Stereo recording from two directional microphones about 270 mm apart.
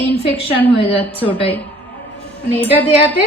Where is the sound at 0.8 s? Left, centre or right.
Left.